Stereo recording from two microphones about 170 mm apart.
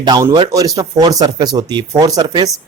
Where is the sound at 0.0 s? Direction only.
25° right (ahead or behind).